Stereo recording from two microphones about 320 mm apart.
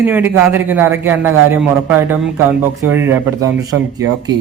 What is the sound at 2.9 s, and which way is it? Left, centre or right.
Speech, centre.